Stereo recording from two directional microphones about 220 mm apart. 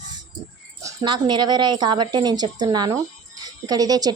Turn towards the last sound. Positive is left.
turn(degrees=-15)  # may be behind; listen again after turning